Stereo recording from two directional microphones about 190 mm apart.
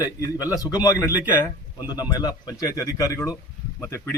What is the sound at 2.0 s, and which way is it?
Speech, 20° left (ahead or behind).